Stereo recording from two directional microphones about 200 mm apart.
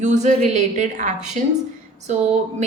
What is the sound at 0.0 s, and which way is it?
Speech, 35° right (ahead or behind).